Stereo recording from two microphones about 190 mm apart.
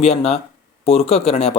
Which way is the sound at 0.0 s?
35° left (ahead or behind).